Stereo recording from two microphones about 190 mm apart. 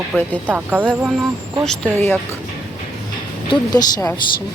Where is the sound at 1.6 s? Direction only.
5° left (ahead or behind).